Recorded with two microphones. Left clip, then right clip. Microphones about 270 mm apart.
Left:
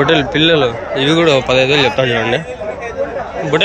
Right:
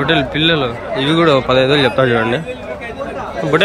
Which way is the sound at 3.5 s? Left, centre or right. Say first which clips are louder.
Even; centre.